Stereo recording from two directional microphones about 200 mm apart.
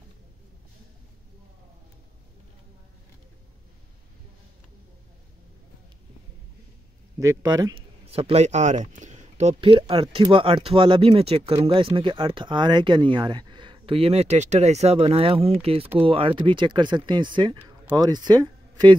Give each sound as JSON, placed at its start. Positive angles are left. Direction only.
{"t": 7.2, "sound": "speech", "side_deg": -15}
{"t": 8.1, "sound": "speech", "side_deg": -30}
{"t": 17.6, "sound": "a sound", "side_deg": -10}
{"t": 17.9, "sound": "speech", "side_deg": -20}